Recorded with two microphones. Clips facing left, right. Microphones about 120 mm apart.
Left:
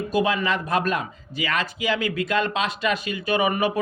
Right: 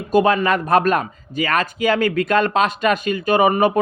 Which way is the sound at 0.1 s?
50° right (ahead or behind).